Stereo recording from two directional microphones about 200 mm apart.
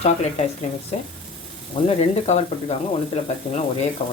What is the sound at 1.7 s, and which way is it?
Speech, 30° left (ahead or behind).